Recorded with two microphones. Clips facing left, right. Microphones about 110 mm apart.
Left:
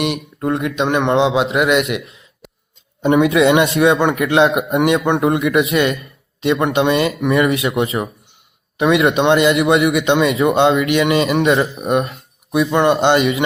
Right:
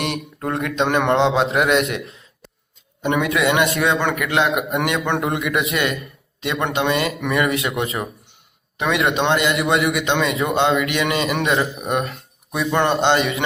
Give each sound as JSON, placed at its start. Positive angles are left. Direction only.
{"t": 0.0, "sound": "a man's voice", "side_deg": 0}
{"t": 3.0, "sound": "a man's voice", "side_deg": 25}
{"t": 12.7, "sound": "a man's voice", "side_deg": 5}
{"t": 13.1, "sound": "a man's voice", "side_deg": -30}